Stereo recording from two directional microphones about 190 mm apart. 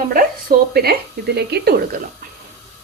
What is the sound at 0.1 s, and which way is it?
A woman's voice, 50° right (ahead or behind).